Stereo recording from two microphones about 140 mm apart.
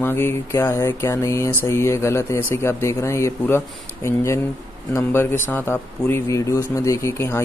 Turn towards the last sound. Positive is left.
turn(degrees=20)  # may be behind; listen again after turning